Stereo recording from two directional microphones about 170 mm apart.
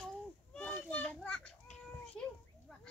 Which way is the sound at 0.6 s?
5° left (ahead or behind).